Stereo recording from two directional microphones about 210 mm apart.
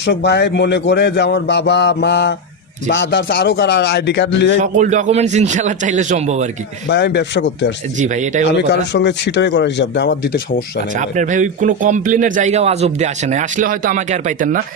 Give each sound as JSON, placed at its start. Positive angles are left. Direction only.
{"t": 0.0, "sound": "speech", "side_deg": 55}
{"t": 4.6, "sound": "speech", "side_deg": -35}
{"t": 6.8, "sound": "a man's voice", "side_deg": 55}
{"t": 7.9, "sound": "speech", "side_deg": -35}
{"t": 8.7, "sound": "a man's voice", "side_deg": 55}
{"t": 10.9, "sound": "speech", "side_deg": -35}